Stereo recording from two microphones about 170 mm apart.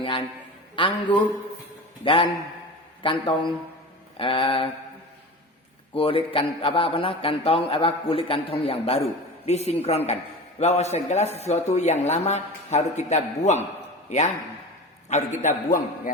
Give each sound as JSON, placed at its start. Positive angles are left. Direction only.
{"t": 0.0, "sound": "a man's voice", "side_deg": 30}
{"t": 5.9, "sound": "a man's voice", "side_deg": 35}